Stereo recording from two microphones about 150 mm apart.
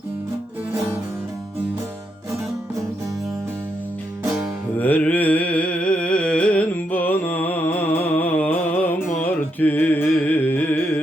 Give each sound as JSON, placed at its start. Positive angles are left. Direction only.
{"t": 4.8, "sound": "music", "side_deg": 10}